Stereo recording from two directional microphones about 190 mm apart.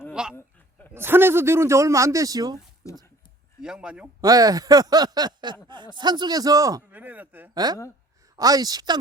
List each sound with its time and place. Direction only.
0.1 s a sound: 5° right (ahead or behind)
0.3 s a sound: 10° left (ahead or behind)
0.9 s a man's voice: 10° right (ahead or behind)
3.6 s speech: 5° right (ahead or behind)
4.2 s a man's voice: 20° right (ahead or behind)
7.5 s a man's voice: 20° right (ahead or behind)